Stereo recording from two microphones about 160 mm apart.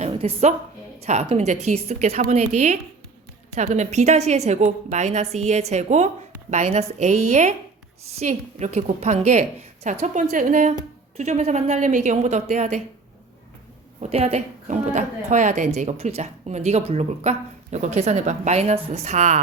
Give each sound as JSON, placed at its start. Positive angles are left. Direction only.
{"t": 0.0, "sound": "a sound", "side_deg": -40}
{"t": 0.9, "sound": "a woman's voice", "side_deg": -40}
{"t": 14.0, "sound": "a woman's voice", "side_deg": -40}